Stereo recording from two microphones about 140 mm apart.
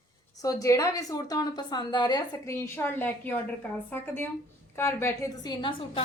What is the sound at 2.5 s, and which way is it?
A woman's voice, 15° left (ahead or behind).